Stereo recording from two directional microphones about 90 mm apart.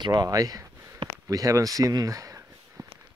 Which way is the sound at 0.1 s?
40° right (ahead or behind).